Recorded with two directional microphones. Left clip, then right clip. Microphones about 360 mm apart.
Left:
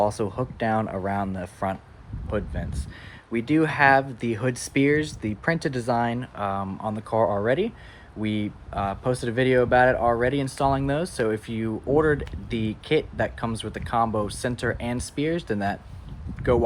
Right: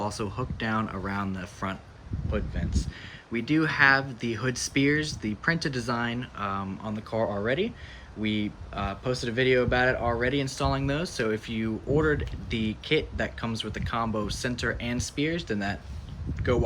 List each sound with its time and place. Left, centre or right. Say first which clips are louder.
0.0 s speech: left 8 dB; centre